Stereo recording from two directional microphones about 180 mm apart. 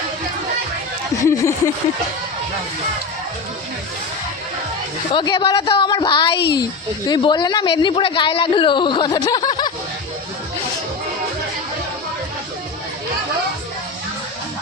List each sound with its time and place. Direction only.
1.2 s speech: 15° left (ahead or behind)
5.1 s a man's voice: 25° left (ahead or behind)